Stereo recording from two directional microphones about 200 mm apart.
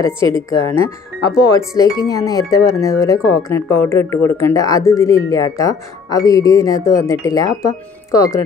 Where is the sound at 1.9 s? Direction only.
20° left (ahead or behind).